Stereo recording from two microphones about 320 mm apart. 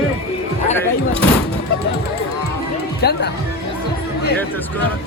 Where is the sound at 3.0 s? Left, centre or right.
Left.